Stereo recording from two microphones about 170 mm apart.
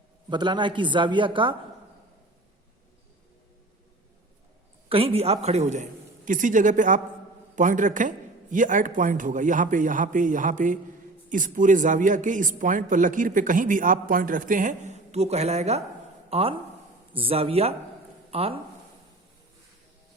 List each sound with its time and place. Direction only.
0.3 s speech: 25° right (ahead or behind)
4.9 s a man's voice: 35° right (ahead or behind)